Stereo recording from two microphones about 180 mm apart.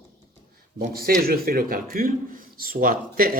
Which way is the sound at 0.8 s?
55° right (ahead or behind).